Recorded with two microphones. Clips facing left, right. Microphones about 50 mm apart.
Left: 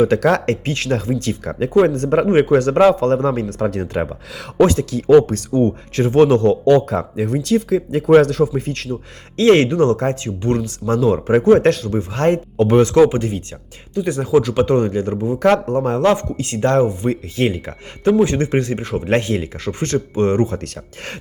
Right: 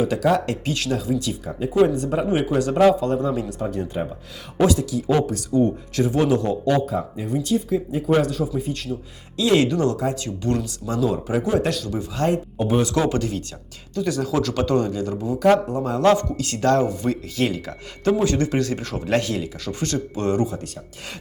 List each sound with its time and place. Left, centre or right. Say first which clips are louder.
0.0 s speech: left 5 dB; left
1.5 s speech: left 10 dB; left
1.9 s speech: left 6 dB; left
4.6 s speech: left 5 dB; left
8.0 s speech: left 10 dB; left
13.1 s speech: left 2 dB; left
14.6 s speech: left 5 dB; left
15.4 s speech: left 2 dB; left
16.0 s speech: left 1 dB; left